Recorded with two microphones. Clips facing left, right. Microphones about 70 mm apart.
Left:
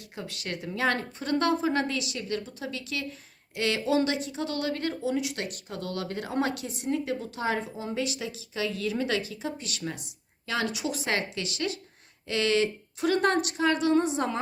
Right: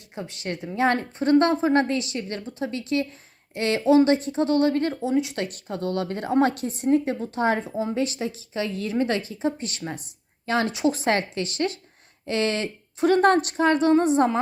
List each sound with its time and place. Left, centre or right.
0.2 s a woman's voice: right